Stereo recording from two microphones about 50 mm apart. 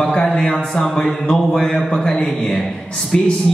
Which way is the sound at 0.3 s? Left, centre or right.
Centre.